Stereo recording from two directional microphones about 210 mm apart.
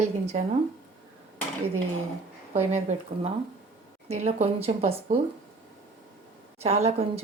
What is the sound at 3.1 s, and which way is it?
A woman's voice, 25° right (ahead or behind).